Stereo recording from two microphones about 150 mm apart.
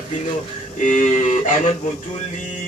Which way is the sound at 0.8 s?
55° left (ahead or behind).